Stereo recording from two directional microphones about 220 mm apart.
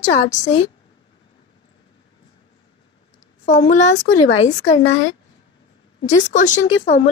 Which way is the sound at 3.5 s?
35° left (ahead or behind).